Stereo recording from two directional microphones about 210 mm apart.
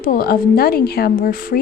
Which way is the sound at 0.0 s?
45° left (ahead or behind).